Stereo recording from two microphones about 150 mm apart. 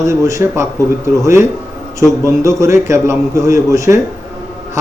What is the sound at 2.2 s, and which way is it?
A man's voice, 20° right (ahead or behind).